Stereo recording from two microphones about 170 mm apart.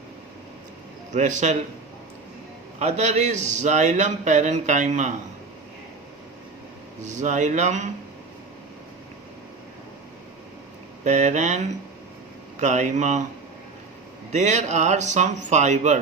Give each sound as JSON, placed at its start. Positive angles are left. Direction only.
{"t": 1.1, "sound": "a man's voice", "side_deg": -45}
{"t": 2.7, "sound": "a man's voice", "side_deg": -40}
{"t": 7.0, "sound": "a man's voice", "side_deg": -45}
{"t": 11.0, "sound": "a man's voice", "side_deg": -45}
{"t": 14.3, "sound": "a man's voice", "side_deg": -45}